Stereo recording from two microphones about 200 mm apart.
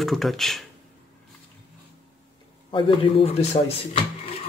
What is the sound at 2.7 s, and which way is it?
A man's voice, 25° left (ahead or behind).